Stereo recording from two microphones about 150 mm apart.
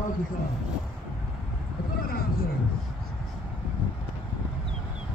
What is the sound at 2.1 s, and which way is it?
Vehicle, 80° left.